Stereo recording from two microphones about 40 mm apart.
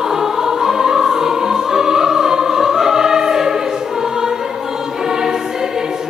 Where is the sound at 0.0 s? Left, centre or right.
Centre.